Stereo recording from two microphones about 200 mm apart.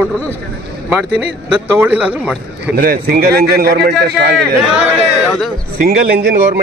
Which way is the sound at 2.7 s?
50° right (ahead or behind).